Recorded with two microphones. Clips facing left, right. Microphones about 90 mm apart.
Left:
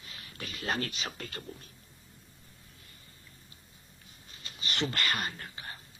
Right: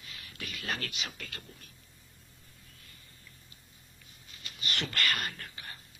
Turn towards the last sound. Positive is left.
turn(degrees=25)  # may be behind; listen again after turning